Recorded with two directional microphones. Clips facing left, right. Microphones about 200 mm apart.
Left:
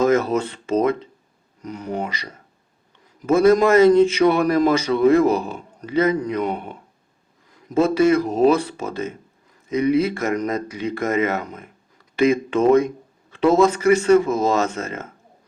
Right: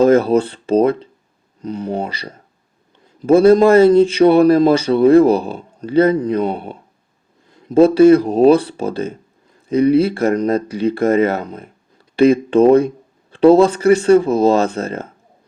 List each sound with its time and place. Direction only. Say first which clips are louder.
0.0 s speech: right 6 dB; 30° right (ahead or behind)